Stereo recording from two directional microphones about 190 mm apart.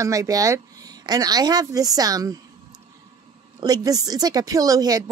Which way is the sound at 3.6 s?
20° right (ahead or behind).